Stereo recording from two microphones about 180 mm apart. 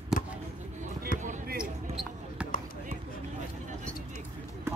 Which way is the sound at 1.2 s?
45° right (ahead or behind).